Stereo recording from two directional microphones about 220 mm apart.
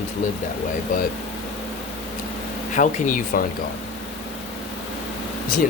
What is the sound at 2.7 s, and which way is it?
Speech, 35° left (ahead or behind).